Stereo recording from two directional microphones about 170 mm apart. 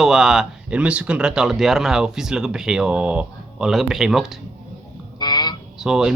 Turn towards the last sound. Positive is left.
turn(degrees=-5)  # may be behind; listen again after turning